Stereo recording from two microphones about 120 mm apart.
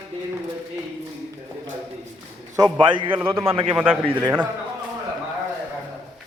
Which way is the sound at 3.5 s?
50° right (ahead or behind).